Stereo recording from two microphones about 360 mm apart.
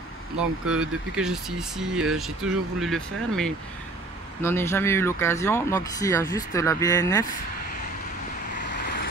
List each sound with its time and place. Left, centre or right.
0.4 s speech: centre
8.5 s vehicle: left